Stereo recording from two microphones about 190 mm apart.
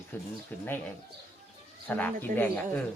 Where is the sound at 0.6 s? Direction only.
10° left (ahead or behind).